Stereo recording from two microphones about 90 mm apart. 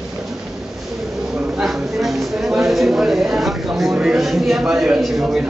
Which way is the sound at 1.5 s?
Centre (ahead or behind).